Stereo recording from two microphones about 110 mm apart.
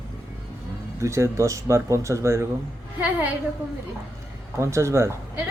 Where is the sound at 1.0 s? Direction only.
25° right (ahead or behind).